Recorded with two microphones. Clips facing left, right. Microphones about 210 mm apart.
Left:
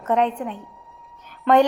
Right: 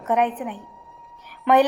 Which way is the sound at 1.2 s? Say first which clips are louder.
Left 1 dB; 15° right (ahead or behind).